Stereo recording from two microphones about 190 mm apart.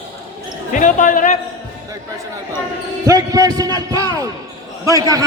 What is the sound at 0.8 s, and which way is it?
Speech, 40° left (ahead or behind).